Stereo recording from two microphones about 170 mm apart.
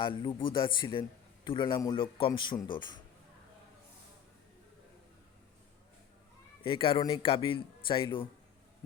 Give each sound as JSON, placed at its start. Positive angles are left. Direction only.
{"t": 0.0, "sound": "a man's voice", "side_deg": 30}
{"t": 6.6, "sound": "a man's voice", "side_deg": 30}